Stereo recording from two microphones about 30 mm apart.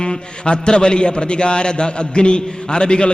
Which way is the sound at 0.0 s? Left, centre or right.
Left.